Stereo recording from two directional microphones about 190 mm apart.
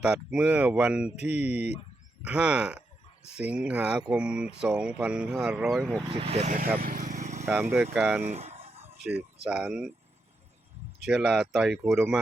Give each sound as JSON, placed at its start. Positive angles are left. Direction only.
{"t": 0.0, "sound": "speech", "side_deg": -5}
{"t": 6.1, "sound": "speech", "side_deg": -30}
{"t": 6.7, "sound": "vehicle", "side_deg": -45}
{"t": 7.4, "sound": "speech", "side_deg": -10}
{"t": 8.3, "sound": "a sound", "side_deg": -35}
{"t": 9.4, "sound": "speech", "side_deg": -5}
{"t": 11.0, "sound": "speech", "side_deg": -5}